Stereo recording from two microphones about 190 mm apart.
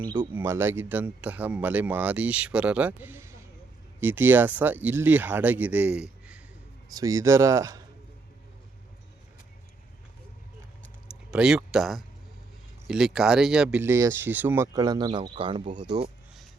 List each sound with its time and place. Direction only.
0.2 s speech: 10° right (ahead or behind)
6.9 s speech: 15° right (ahead or behind)
11.3 s speech: 5° right (ahead or behind); by 16.0 s 25° right (ahead or behind)